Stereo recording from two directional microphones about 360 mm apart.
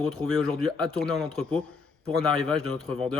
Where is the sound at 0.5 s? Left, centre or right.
Centre.